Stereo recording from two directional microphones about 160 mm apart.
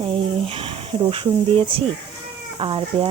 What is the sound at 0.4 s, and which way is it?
Speech, 35° right (ahead or behind).